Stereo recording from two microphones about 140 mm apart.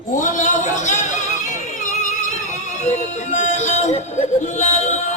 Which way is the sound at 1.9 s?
60° left (ahead or behind).